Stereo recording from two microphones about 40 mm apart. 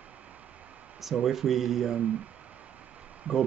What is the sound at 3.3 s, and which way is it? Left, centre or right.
Speech, right.